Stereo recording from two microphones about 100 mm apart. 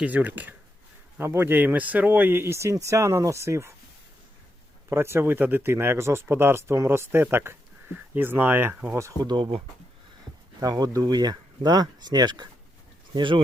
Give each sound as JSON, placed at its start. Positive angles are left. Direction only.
{"t": 0.0, "sound": "speech", "side_deg": -15}
{"t": 4.9, "sound": "speech", "side_deg": -25}
{"t": 9.2, "sound": "speech", "side_deg": -45}
{"t": 10.6, "sound": "speech", "side_deg": -40}